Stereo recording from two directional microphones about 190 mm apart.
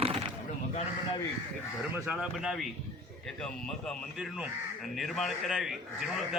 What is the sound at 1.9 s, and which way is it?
A man's voice, 10° right (ahead or behind).